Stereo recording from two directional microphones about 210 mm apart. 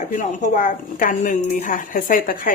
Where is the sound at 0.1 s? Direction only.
35° left (ahead or behind).